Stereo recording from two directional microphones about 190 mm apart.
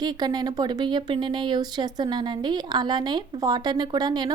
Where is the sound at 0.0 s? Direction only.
20° right (ahead or behind).